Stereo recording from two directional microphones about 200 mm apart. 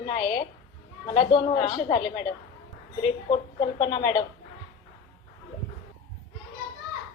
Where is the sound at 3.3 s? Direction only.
25° left (ahead or behind).